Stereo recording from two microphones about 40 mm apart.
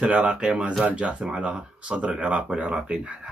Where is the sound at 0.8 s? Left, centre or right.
Right.